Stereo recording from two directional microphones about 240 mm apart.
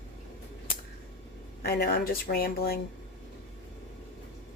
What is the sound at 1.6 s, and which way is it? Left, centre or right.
Speech, left.